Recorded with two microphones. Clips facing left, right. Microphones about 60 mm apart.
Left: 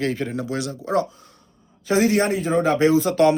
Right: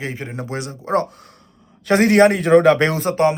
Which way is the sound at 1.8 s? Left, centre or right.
Right.